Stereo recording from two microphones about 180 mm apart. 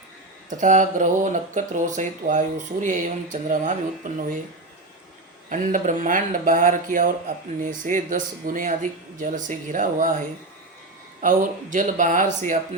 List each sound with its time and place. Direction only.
0.6 s speech: 40° right (ahead or behind)
5.5 s speech: 45° right (ahead or behind)